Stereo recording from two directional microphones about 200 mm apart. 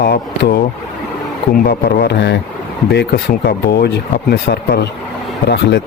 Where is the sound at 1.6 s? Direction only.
50° left (ahead or behind).